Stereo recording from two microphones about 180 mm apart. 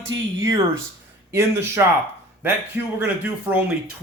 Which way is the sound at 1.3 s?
15° right (ahead or behind).